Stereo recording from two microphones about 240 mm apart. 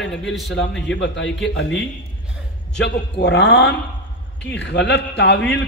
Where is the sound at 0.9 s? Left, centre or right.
Left.